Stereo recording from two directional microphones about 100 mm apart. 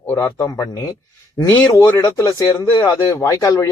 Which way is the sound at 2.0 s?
40° left (ahead or behind).